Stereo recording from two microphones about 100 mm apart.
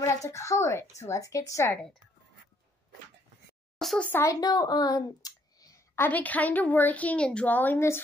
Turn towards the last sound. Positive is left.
turn(degrees=20)  # may be behind; listen again after turning